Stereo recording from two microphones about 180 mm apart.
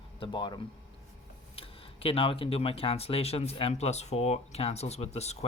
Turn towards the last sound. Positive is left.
turn(degrees=35)  # may be behind; listen again after turning